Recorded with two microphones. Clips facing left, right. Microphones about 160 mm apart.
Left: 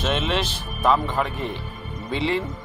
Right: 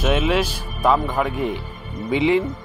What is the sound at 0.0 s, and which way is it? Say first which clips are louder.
Speech: right 5 dB; 10° right (ahead or behind).